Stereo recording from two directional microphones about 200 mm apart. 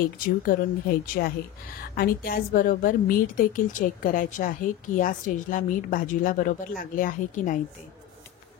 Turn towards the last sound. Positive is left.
turn(degrees=40)  # may be behind; listen again after turning